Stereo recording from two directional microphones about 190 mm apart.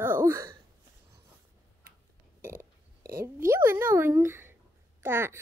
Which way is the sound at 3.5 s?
15° right (ahead or behind).